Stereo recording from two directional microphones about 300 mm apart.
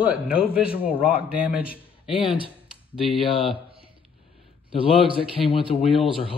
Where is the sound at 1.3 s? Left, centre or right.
Centre.